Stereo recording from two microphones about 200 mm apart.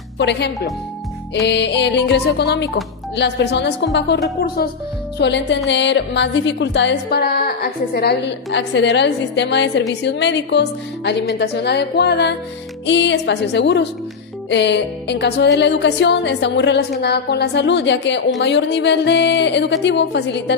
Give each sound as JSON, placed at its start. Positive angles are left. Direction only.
{"t": 0.2, "sound": "a woman's voice", "side_deg": 60}
{"t": 4.4, "sound": "speech", "side_deg": 50}
{"t": 5.1, "sound": "a woman's voice", "side_deg": 60}